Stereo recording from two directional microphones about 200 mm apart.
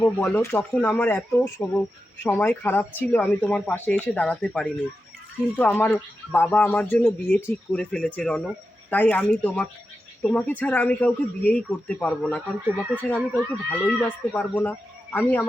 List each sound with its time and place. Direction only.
0.0 s speech: 10° left (ahead or behind)